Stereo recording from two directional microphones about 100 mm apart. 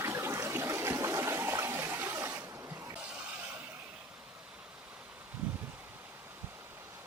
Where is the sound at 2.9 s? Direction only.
15° right (ahead or behind).